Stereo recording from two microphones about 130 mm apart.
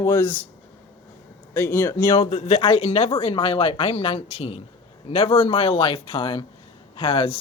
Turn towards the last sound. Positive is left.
turn(degrees=45)  # may be behind; listen again after turning